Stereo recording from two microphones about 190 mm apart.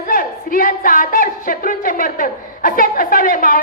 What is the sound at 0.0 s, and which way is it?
Speech, 45° left (ahead or behind).